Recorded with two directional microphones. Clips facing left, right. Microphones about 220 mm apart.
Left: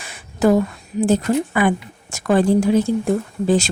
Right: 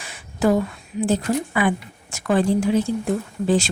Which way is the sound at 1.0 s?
45° left (ahead or behind).